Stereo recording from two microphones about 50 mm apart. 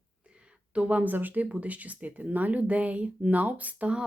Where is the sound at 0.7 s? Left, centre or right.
Right.